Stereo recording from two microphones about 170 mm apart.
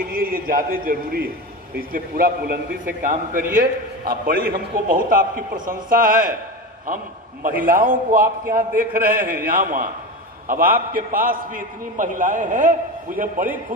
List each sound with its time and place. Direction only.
0.0 s a man's voice: 60° right (ahead or behind)
7.4 s a man's voice: 55° right (ahead or behind)